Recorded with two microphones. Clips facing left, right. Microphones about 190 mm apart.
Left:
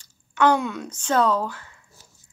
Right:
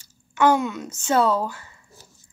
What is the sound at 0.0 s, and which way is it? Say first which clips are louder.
Speech: right 1 dB; 5° right (ahead or behind).